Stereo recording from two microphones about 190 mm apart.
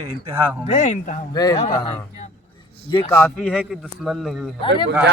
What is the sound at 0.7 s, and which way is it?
Speech, 40° left (ahead or behind).